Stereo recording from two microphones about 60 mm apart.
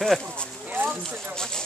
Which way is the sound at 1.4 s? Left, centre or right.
Centre.